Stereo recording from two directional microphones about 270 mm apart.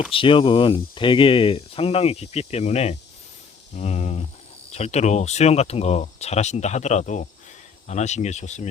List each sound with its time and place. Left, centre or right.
0.1 s speech: centre